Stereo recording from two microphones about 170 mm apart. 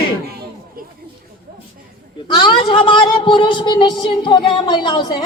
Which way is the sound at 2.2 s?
30° left (ahead or behind).